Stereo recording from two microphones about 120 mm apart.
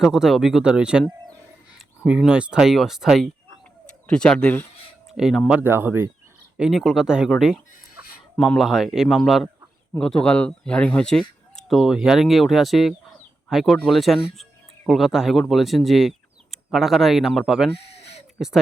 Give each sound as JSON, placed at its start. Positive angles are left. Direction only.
{"t": 0.0, "sound": "speech", "side_deg": -5}
{"t": 2.0, "sound": "speech", "side_deg": -5}
{"t": 5.1, "sound": "speech", "side_deg": -5}
{"t": 5.5, "sound": "speech", "side_deg": -15}
{"t": 6.6, "sound": "speech", "side_deg": 0}
{"t": 17.7, "sound": "a sound", "side_deg": 60}
{"t": 18.3, "sound": "speech", "side_deg": -5}